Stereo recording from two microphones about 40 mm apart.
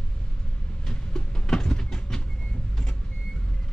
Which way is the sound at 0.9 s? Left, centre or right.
Centre.